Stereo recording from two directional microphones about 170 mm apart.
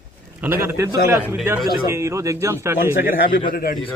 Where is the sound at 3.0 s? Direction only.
60° left (ahead or behind).